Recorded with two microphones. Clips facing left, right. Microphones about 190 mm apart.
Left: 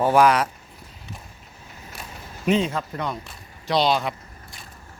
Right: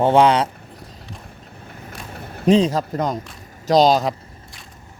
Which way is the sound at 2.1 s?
60° right (ahead or behind).